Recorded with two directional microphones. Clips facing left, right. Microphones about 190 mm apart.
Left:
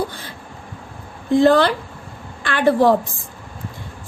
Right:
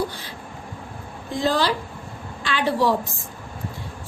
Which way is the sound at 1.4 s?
60° left (ahead or behind).